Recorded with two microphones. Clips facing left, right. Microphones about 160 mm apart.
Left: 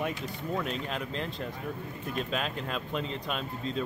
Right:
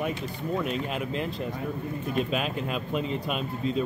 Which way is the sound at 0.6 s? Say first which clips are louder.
Right 4 dB; 10° right (ahead or behind).